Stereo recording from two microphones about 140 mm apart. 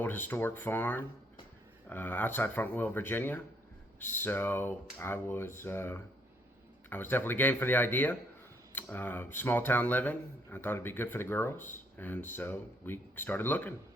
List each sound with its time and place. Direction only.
0.0 s speech: 15° left (ahead or behind)